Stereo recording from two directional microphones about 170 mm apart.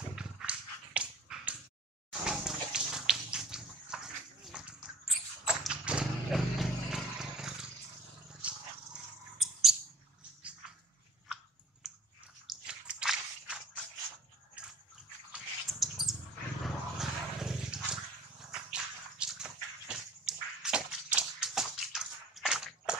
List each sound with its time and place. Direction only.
0.1 s dog: 5° right (ahead or behind)
2.2 s bathtub: 5° right (ahead or behind)
8.3 s dog: 5° right (ahead or behind)
11.8 s chewing: centre (ahead or behind)
12.4 s biting: 5° right (ahead or behind)
14.6 s a sound: 5° right (ahead or behind)
15.3 s cat: centre (ahead or behind)
16.6 s a sound: centre (ahead or behind)